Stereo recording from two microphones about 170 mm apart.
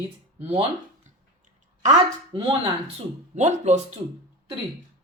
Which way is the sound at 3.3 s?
45° right (ahead or behind).